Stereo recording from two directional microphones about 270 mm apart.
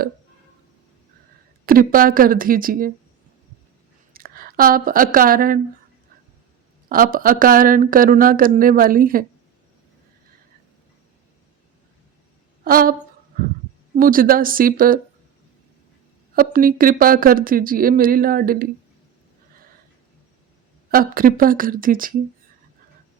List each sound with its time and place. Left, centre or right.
1.6 s speech: right
4.1 s speech: right
6.8 s speech: right
12.6 s speech: right
16.3 s speech: right
20.9 s speech: right